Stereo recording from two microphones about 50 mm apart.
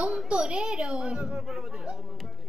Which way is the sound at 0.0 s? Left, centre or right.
Centre.